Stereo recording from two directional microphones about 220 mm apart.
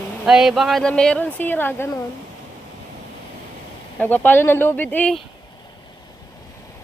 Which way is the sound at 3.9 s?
10° left (ahead or behind).